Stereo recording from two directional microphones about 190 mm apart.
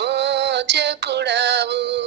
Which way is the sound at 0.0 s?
65° right (ahead or behind).